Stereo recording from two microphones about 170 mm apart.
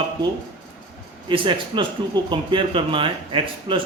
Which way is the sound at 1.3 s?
30° right (ahead or behind).